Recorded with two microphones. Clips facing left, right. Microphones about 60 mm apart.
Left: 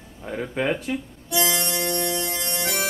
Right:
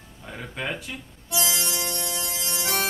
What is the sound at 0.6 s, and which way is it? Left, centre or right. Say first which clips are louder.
Speech: left 7 dB; centre.